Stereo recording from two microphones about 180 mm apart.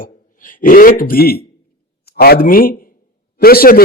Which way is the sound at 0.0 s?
50° left (ahead or behind).